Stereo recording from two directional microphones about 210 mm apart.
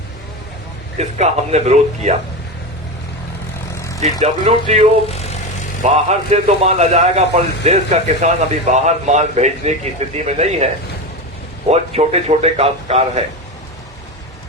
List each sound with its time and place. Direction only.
0.9 s a man's voice: 30° right (ahead or behind)
4.0 s a man's voice: 30° right (ahead or behind)
11.7 s a man's voice: 30° right (ahead or behind)